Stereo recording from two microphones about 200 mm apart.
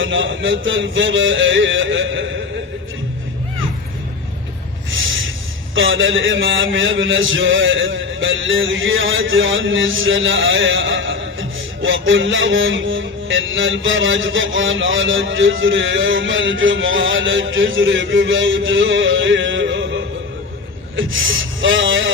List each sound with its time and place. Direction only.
0.0 s a man's voice: 70° right (ahead or behind)
4.9 s snort: 75° right (ahead or behind)
5.7 s a man's voice: 75° right (ahead or behind)
20.9 s speech: 75° right (ahead or behind)